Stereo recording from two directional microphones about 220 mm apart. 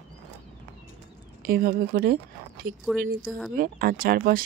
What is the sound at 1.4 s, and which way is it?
A woman's voice, 40° right (ahead or behind).